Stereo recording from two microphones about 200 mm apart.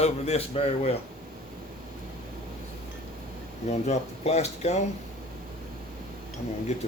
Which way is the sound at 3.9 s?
35° left (ahead or behind).